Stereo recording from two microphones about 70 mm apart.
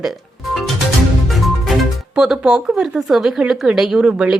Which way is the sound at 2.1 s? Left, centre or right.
Centre.